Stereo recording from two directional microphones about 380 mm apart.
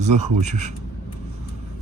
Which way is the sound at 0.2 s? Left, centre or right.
Centre.